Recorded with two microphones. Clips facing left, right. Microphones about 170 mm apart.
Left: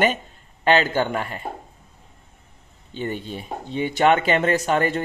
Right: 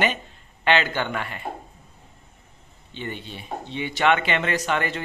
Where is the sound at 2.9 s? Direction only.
45° left (ahead or behind).